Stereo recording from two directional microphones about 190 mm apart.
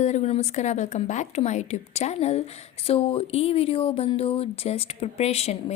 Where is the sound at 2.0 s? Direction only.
35° left (ahead or behind).